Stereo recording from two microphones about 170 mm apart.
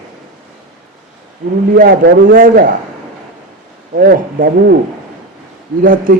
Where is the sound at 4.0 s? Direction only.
60° right (ahead or behind).